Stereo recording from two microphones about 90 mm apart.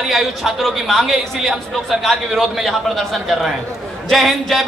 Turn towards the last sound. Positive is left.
turn(degrees=0)  # may be behind; listen again after turning